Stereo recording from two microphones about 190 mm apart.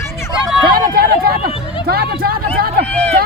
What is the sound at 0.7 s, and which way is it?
Chatter, 50° right (ahead or behind).